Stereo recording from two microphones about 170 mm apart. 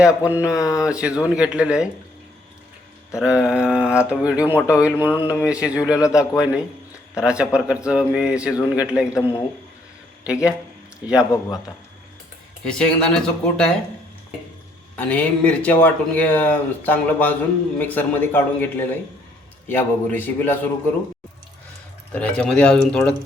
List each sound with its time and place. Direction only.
0.3 s speech: 10° right (ahead or behind)
0.6 s a man's voice: 20° left (ahead or behind)
0.9 s a man's voice: 5° right (ahead or behind)
3.2 s speech: 5° right (ahead or behind)
4.5 s speech: 15° left (ahead or behind)
4.8 s a man's voice: 10° right (ahead or behind)
11.3 s a man's voice: 20° left (ahead or behind)
12.6 s a man's voice: 5° left (ahead or behind)
14.9 s speech: 10° left (ahead or behind)
22.1 s a man's voice: 5° left (ahead or behind)